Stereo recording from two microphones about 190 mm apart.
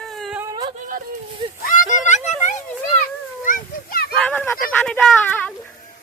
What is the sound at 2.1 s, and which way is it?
Music, 40° left (ahead or behind).